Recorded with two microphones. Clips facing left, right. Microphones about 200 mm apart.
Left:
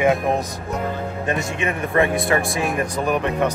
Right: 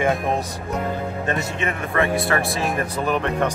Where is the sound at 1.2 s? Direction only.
15° left (ahead or behind).